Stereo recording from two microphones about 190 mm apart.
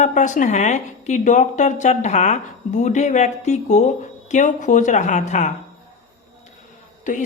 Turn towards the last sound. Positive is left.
turn(degrees=45)  # may be behind; listen again after turning